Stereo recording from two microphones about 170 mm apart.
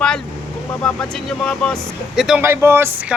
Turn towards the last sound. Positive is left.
turn(degrees=-10)  # may be behind; listen again after turning